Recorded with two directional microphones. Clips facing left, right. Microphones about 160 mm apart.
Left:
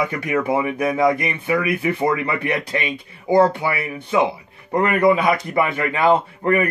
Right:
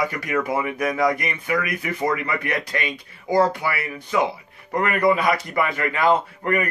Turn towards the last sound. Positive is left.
turn(degrees=25)  # may be behind; listen again after turning